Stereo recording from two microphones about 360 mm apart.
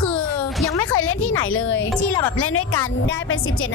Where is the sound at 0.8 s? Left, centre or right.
Left.